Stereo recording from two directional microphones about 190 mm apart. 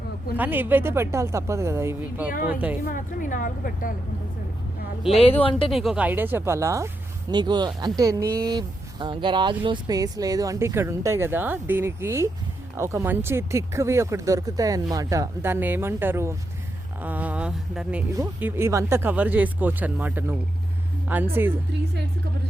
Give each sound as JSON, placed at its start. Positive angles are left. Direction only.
{"t": 0.3, "sound": "speech", "side_deg": -10}
{"t": 2.8, "sound": "a woman's voice", "side_deg": 45}
{"t": 5.5, "sound": "speech", "side_deg": 30}
{"t": 5.7, "sound": "speech", "side_deg": 0}